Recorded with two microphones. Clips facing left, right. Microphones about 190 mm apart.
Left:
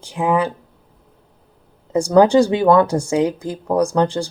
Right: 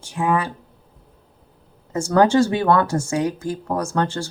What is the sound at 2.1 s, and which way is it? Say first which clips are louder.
Speech: left 3 dB; 15° left (ahead or behind).